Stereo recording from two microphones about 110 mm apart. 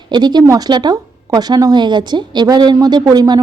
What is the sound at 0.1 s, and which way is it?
A woman's voice, 40° right (ahead or behind).